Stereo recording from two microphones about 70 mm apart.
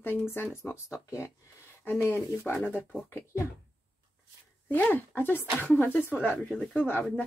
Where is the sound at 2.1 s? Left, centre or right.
Left.